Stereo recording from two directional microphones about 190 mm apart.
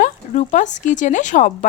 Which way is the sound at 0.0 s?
40° left (ahead or behind).